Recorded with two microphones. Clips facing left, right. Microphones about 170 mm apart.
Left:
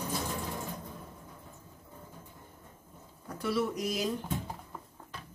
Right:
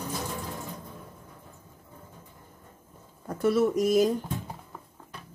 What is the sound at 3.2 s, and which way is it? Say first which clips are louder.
Speech: right 8 dB; 50° right (ahead or behind).